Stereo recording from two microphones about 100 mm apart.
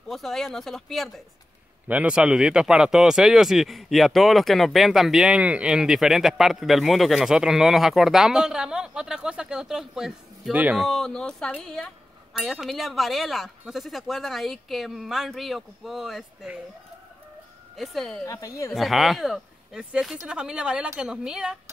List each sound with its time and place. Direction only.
0.1 s speech: centre (ahead or behind)
1.9 s speech: 10° right (ahead or behind)
10.5 s a woman's voice: 15° right (ahead or behind)
10.8 s speech: 5° left (ahead or behind)
17.7 s speech: centre (ahead or behind)
18.2 s a woman's voice: 30° left (ahead or behind)
18.7 s a woman's voice: centre (ahead or behind)